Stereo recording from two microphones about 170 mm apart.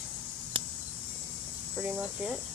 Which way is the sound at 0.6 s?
30° right (ahead or behind).